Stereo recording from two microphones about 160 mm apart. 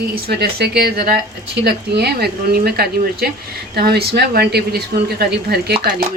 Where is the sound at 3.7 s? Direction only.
85° right.